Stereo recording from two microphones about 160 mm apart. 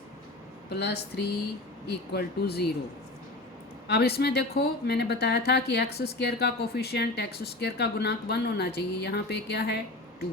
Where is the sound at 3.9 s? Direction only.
90° left.